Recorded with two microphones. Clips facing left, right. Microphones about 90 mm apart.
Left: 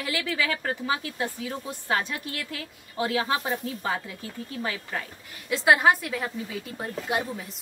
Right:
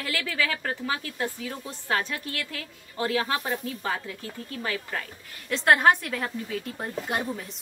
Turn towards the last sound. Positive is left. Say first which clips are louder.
# left 1 dB
turn(degrees=0)  # may be behind; listen again after turning